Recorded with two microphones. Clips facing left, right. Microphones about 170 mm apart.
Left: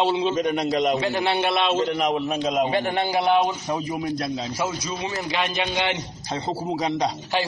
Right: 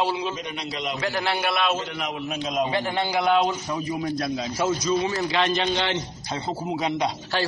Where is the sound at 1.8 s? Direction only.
40° left (ahead or behind); by 3.4 s 20° left (ahead or behind).